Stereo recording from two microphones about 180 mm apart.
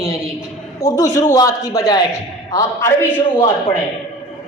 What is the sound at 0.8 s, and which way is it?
A man's voice, 20° left (ahead or behind).